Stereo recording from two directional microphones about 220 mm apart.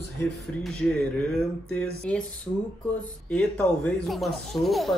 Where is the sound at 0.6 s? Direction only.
5° left (ahead or behind).